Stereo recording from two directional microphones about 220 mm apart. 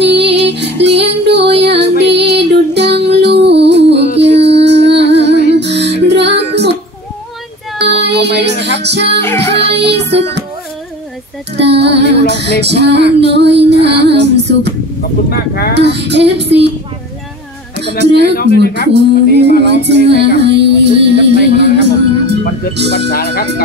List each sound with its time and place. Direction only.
0.3 s music: 50° right (ahead or behind)
6.5 s child singing: 50° right (ahead or behind)
7.8 s music: 50° right (ahead or behind)
11.5 s female singing: 50° right (ahead or behind)
15.2 s a sound: 45° left (ahead or behind)
15.7 s music: 50° right (ahead or behind)
17.7 s a sound: 50° right (ahead or behind)
18.9 s music: 50° right (ahead or behind)
22.8 s speech: 50° right (ahead or behind)